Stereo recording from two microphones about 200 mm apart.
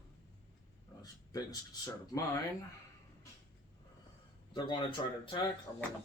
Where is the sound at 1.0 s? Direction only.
20° left (ahead or behind).